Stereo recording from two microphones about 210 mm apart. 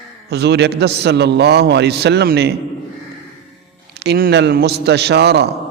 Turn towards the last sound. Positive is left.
turn(degrees=-50)  # may be behind; listen again after turning